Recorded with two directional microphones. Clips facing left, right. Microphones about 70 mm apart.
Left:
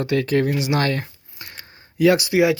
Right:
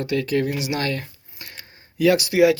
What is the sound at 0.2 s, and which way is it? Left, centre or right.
Speech, left.